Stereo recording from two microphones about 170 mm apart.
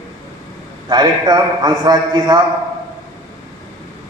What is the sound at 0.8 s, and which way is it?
A man's voice, 25° right (ahead or behind).